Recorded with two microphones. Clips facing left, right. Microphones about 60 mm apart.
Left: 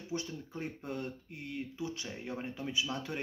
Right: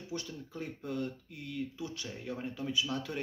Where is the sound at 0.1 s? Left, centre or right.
Left.